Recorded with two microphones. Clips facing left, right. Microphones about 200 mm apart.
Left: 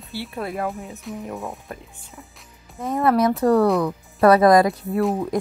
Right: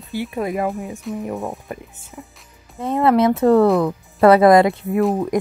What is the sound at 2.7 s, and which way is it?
Speech, 30° right (ahead or behind).